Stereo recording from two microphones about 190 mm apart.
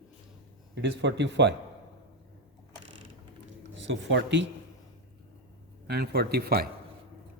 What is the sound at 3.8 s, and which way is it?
Speech, 75° right (ahead or behind).